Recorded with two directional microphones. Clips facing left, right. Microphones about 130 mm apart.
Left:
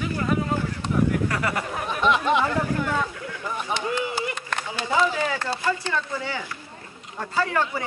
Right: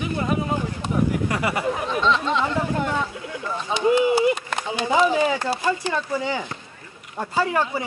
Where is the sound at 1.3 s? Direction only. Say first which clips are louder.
Right 2 dB; 15° right (ahead or behind).